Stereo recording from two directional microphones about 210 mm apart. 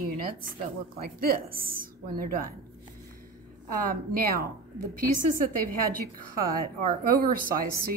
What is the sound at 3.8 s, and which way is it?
Speech, 45° right (ahead or behind).